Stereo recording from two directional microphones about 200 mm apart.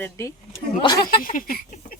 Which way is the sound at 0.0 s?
15° left (ahead or behind).